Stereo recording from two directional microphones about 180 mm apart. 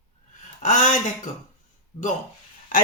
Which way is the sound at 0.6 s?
45° left (ahead or behind).